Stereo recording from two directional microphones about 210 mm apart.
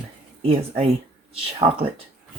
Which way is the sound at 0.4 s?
25° right (ahead or behind).